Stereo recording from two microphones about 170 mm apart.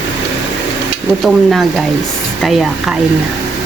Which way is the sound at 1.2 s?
Centre (ahead or behind).